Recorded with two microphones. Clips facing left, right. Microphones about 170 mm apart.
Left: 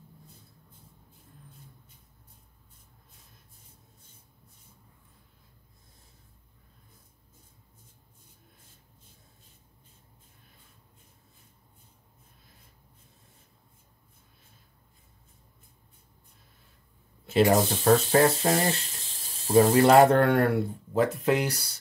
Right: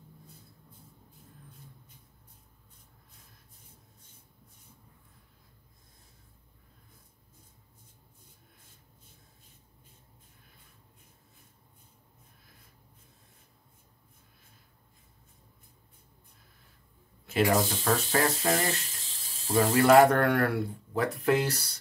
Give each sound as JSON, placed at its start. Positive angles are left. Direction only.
{"t": 17.3, "sound": "speech", "side_deg": 35}